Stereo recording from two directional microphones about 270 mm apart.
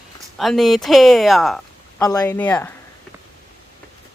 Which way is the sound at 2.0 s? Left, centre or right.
Centre.